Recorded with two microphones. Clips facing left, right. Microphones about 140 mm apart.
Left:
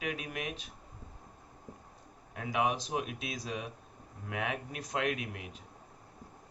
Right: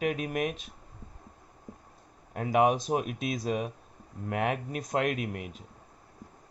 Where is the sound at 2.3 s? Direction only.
40° right (ahead or behind).